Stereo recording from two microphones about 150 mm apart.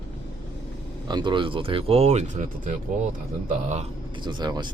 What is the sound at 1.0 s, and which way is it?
Speech, 30° right (ahead or behind).